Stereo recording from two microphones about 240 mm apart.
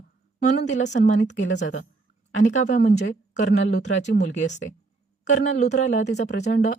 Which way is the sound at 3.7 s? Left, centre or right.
Left.